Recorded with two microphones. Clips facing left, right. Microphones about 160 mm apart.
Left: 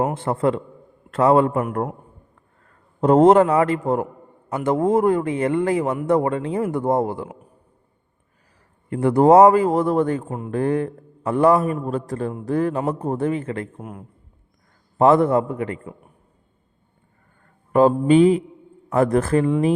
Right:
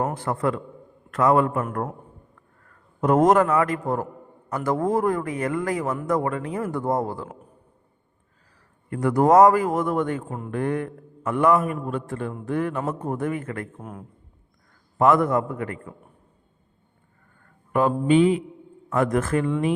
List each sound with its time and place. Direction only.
0.1 s a man's voice: 25° left (ahead or behind)
8.9 s a man's voice: 30° left (ahead or behind)
13.7 s a man's voice: 5° left (ahead or behind)
14.9 s speech: 30° left (ahead or behind)
17.7 s a man's voice: 35° left (ahead or behind)